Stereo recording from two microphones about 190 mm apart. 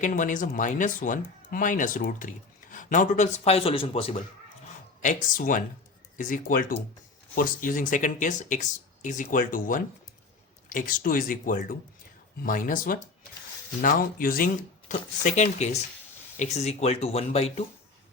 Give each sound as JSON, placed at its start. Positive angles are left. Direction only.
{"t": 0.0, "sound": "speech", "side_deg": 45}
{"t": 5.0, "sound": "speech", "side_deg": 45}